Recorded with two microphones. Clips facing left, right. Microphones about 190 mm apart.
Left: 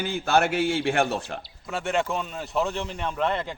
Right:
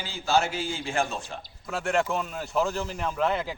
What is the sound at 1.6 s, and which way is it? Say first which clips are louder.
A man's voice: even; centre (ahead or behind).